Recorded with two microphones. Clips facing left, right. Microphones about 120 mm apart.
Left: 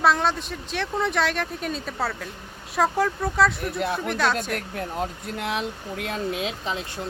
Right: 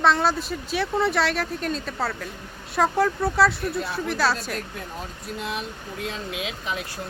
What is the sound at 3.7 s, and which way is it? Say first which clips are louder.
Speech: left 3 dB; 70° left (ahead or behind).